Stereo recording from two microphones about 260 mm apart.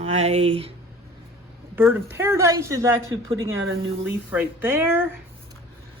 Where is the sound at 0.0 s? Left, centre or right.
Right.